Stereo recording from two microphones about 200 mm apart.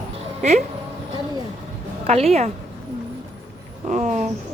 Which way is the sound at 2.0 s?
30° right (ahead or behind).